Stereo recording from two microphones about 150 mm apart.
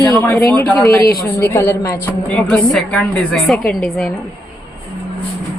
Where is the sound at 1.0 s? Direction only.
80° left.